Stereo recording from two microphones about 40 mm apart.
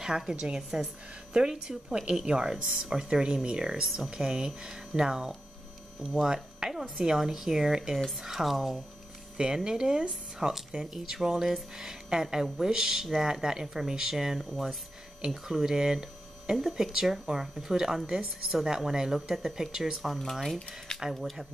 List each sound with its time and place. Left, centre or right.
0.3 s a woman's voice: centre
3.8 s a woman's voice: centre
9.4 s a woman's voice: centre
15.5 s a woman's voice: centre